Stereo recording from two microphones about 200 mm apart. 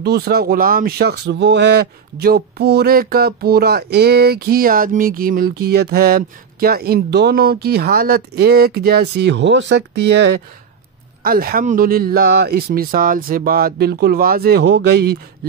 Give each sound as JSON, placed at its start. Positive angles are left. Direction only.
{"t": 0.0, "sound": "speech", "side_deg": -55}
{"t": 11.2, "sound": "speech", "side_deg": -45}